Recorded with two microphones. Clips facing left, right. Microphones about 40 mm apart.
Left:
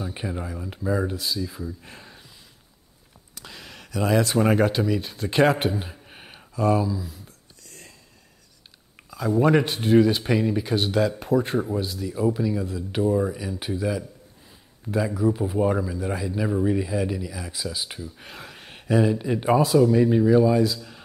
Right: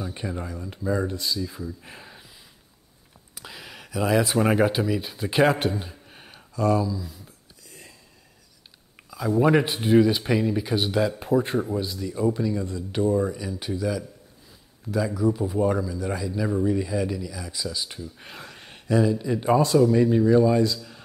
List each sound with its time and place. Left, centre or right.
0.1 s speech: centre
3.3 s a sound: centre
4.2 s speech: centre
5.6 s speech: centre
6.0 s a sound: left
7.2 s whispering: centre
9.1 s speech: centre; by 18.1 s left
18.1 s a sound: centre
18.8 s speech: left
19.6 s speech: centre